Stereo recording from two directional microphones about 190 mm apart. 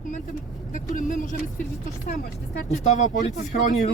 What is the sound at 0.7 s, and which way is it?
Speech, 45° left (ahead or behind).